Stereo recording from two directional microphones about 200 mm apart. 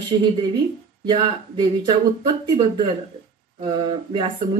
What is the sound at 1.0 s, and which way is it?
Speech, 25° right (ahead or behind).